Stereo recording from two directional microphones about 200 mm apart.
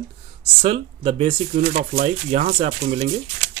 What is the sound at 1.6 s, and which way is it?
Speech, 45° right (ahead or behind).